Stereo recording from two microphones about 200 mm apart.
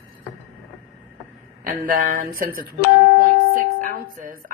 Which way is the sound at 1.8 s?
40° right (ahead or behind).